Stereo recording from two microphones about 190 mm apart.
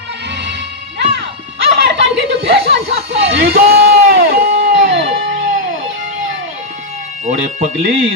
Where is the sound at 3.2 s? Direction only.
55° right (ahead or behind).